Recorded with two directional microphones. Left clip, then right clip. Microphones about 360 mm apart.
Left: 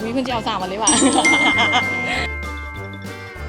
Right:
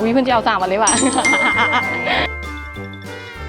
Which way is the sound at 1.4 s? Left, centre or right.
Centre.